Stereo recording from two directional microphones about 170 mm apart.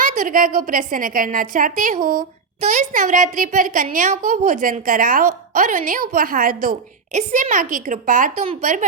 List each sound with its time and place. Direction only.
0.0 s a woman's voice: 50° right (ahead or behind)